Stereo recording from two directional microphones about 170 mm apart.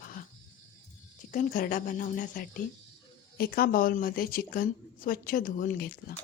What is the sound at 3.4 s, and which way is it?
A woman's voice, 65° left (ahead or behind).